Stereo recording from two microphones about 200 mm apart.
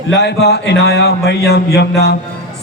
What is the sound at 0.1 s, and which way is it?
A man's voice, 55° left (ahead or behind).